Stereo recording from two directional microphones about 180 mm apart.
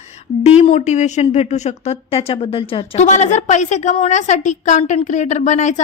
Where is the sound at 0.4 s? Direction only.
35° left (ahead or behind).